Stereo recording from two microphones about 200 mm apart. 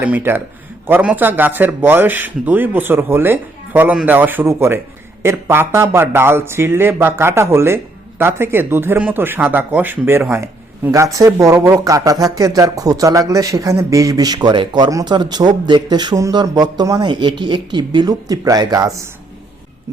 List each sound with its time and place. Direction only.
0.0 s speech: 10° right (ahead or behind)